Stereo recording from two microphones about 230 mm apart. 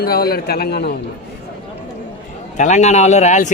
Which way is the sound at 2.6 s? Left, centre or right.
Left.